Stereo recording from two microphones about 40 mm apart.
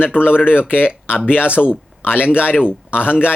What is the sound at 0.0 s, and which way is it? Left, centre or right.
Speech, left.